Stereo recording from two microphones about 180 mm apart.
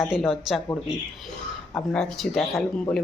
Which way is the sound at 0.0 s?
Centre (ahead or behind).